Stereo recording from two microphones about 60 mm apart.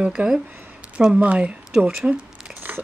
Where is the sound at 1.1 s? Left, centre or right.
Right.